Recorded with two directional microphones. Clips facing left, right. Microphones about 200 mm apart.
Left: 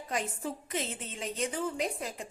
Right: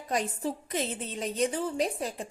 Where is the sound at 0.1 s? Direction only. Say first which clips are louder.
Right 5 dB; 35° right (ahead or behind).